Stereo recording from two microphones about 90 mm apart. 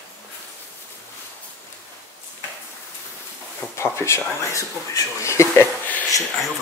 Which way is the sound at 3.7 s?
30° left (ahead or behind).